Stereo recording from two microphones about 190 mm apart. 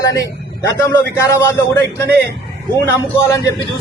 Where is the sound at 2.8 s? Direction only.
15° left (ahead or behind).